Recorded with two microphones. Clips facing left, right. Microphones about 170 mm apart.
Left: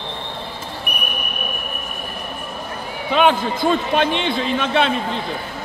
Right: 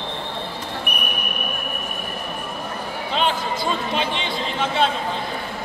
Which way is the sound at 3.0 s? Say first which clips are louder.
Left 7 dB; 60° left (ahead or behind).